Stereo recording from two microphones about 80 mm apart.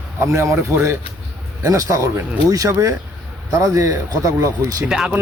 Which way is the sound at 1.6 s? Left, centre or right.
Right.